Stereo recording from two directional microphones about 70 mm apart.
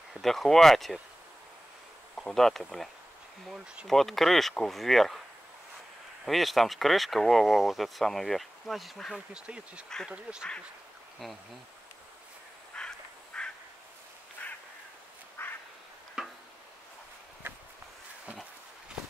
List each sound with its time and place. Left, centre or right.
0.1 s speech: centre
2.1 s speech: centre
6.2 s speech: centre
9.3 s speech: centre
12.7 s duck: centre
15.4 s quack: left
16.2 s tick-tock: centre